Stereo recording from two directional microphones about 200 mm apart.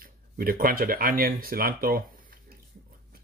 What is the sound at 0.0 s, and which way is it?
Speech, 45° right (ahead or behind).